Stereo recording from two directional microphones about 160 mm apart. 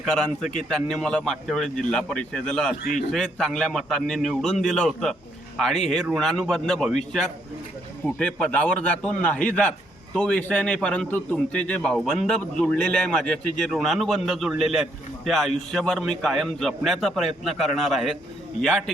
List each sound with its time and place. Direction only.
0.0 s a man's voice: 5° left (ahead or behind)